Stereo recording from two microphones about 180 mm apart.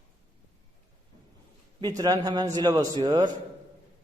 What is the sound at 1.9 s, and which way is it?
A man's voice, 20° right (ahead or behind).